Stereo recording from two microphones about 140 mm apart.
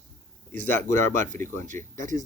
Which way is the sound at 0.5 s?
65° right (ahead or behind).